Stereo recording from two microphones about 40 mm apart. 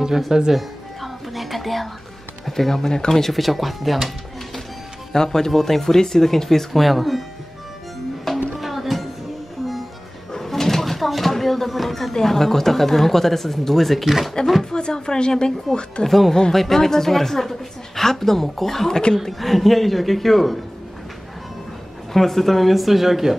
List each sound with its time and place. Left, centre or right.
0.3 s speech: centre
0.6 s music: centre
2.4 s speech: centre
5.1 s a woman's voice: centre
8.5 s music: centre
10.3 s bird: centre
14.4 s speech: centre
14.7 s speech: left
16.1 s a woman's voice: centre
22.1 s speech: centre